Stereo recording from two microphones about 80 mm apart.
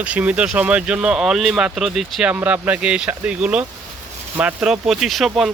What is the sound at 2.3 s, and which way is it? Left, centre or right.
Speech, centre.